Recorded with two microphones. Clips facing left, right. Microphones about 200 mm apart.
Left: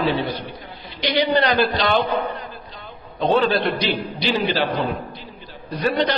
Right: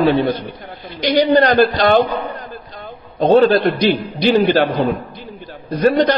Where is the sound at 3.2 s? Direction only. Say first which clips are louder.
Right 7 dB; 45° right (ahead or behind).